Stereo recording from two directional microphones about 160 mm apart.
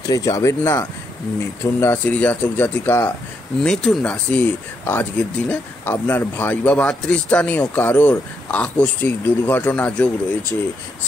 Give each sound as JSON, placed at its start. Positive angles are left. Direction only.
{"t": 0.1, "sound": "speech", "side_deg": 20}